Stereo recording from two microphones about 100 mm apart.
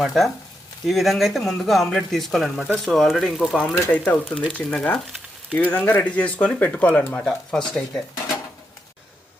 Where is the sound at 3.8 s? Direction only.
20° left (ahead or behind).